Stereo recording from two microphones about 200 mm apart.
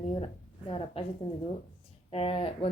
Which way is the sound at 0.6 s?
30° left (ahead or behind).